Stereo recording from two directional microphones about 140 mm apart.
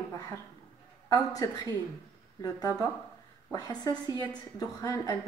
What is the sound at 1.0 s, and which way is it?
A woman's voice, 25° left (ahead or behind).